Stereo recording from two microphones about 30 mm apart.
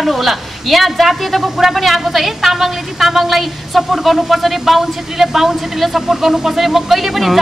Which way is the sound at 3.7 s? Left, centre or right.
Centre.